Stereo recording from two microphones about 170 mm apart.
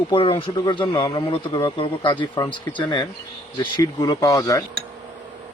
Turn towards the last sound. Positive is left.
turn(degrees=20)  # may be behind; listen again after turning